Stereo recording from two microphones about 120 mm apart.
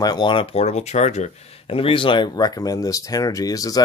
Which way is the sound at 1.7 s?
50° left (ahead or behind).